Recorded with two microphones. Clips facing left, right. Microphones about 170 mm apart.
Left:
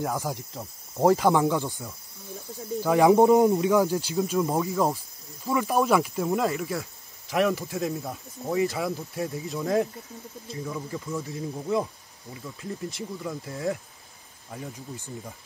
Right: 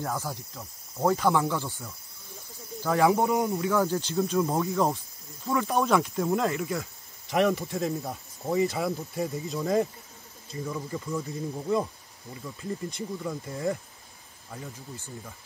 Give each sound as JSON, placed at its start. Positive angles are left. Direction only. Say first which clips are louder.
{"t": 0.0, "sound": "speech", "louder": "left 3 dB", "side_deg": 15}
{"t": 0.6, "sound": "cricket", "louder": "left 6 dB", "side_deg": 35}
{"t": 1.2, "sound": "speech", "louder": "left 3 dB", "side_deg": 20}
{"t": 12.9, "sound": "speech", "louder": "even", "side_deg": 0}